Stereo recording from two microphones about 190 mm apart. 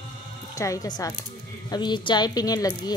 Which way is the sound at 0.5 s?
15° left (ahead or behind).